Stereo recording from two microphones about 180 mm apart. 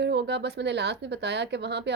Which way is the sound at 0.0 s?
70° right (ahead or behind).